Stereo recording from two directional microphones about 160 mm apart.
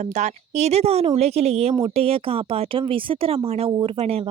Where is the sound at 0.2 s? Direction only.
45° right (ahead or behind).